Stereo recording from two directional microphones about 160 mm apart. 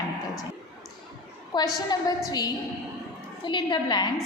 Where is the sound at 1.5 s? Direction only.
25° left (ahead or behind).